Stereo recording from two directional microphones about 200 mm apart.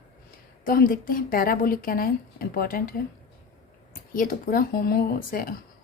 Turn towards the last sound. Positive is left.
turn(degrees=45)  # may be behind; listen again after turning